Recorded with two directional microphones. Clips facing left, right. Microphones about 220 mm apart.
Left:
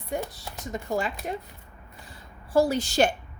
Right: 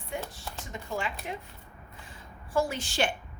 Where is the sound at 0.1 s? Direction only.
40° left (ahead or behind).